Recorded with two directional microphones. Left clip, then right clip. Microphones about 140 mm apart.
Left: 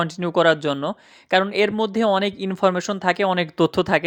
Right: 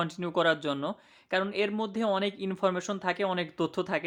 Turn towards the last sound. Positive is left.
turn(degrees=55)  # may be behind; listen again after turning